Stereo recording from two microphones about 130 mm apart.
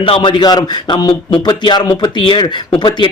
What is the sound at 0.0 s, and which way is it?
A man's voice, 40° left (ahead or behind).